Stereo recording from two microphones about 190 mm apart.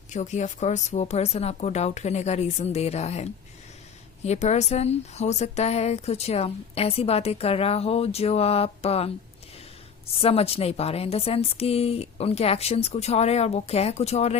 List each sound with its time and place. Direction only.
0.1 s speech: 40° left (ahead or behind)
10.2 s speech: 30° left (ahead or behind)